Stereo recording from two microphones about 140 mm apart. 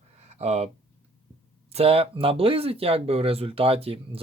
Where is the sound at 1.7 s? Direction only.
45° right (ahead or behind).